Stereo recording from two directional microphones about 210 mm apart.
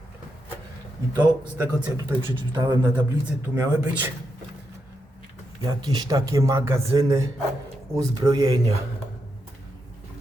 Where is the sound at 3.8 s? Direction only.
5° right (ahead or behind).